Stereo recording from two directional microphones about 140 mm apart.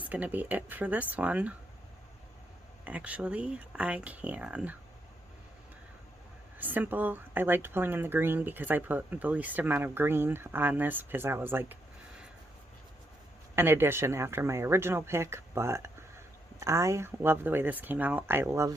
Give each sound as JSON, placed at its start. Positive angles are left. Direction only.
{"t": 0.0, "sound": "speech", "side_deg": -10}
{"t": 2.8, "sound": "speech", "side_deg": -10}
{"t": 6.6, "sound": "speech", "side_deg": -15}
{"t": 13.6, "sound": "speech", "side_deg": -15}